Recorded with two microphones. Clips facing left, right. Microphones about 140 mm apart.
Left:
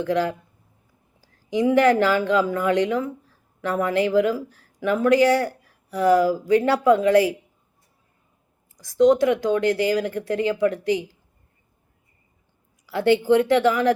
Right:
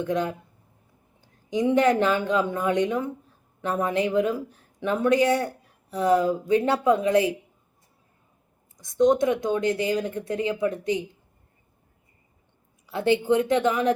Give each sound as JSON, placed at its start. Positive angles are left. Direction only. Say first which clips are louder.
{"t": 0.0, "sound": "speech", "louder": "left 3 dB", "side_deg": -20}
{"t": 8.8, "sound": "speech", "louder": "left 3 dB", "side_deg": -25}
{"t": 12.8, "sound": "speech", "louder": "left 3 dB", "side_deg": -20}